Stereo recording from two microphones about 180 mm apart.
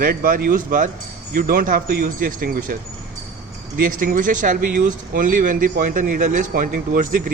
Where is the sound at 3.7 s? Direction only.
50° right (ahead or behind).